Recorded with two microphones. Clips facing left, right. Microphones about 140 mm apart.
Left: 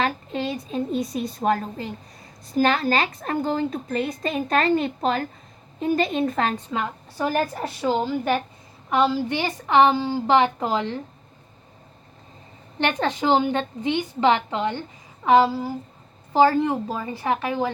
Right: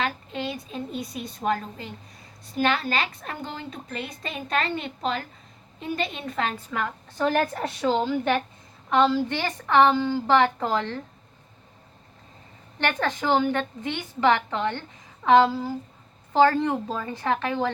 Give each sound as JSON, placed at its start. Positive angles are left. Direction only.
{"t": 0.0, "sound": "a woman's voice", "side_deg": 40}
{"t": 6.7, "sound": "a woman's voice", "side_deg": 20}
{"t": 7.3, "sound": "a woman's voice", "side_deg": 5}
{"t": 12.8, "sound": "a woman's voice", "side_deg": 20}